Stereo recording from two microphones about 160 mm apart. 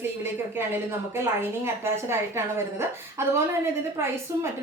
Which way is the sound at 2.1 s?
15° right (ahead or behind).